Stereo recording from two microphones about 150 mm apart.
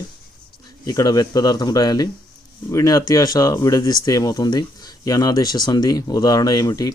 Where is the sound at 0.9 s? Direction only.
25° left (ahead or behind).